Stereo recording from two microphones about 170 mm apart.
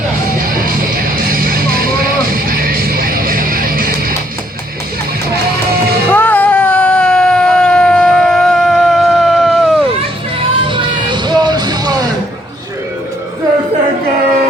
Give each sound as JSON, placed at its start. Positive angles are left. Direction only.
{"t": 0.3, "sound": "music", "side_deg": -55}
{"t": 6.1, "sound": "a sound", "side_deg": 10}
{"t": 10.4, "sound": "music", "side_deg": -30}